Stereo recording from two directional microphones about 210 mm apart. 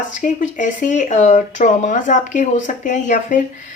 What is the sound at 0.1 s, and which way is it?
Speech, 40° left (ahead or behind).